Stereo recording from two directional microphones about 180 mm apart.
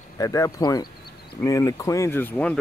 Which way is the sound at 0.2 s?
20° left (ahead or behind).